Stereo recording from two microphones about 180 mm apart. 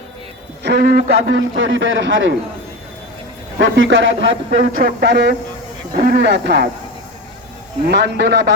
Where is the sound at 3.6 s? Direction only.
90° right.